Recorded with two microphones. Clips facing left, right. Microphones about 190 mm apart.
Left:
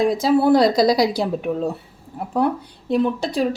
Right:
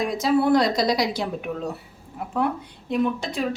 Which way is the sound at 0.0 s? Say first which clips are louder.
Left 4 dB; 30° left (ahead or behind).